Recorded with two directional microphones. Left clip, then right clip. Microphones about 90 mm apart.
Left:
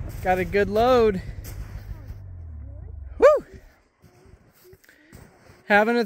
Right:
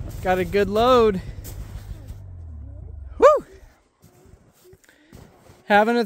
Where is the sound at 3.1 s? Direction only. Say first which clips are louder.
Right 2 dB; centre (ahead or behind).